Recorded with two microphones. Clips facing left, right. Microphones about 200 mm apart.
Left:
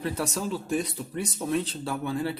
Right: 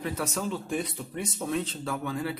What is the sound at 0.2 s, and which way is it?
Speech, 35° left (ahead or behind).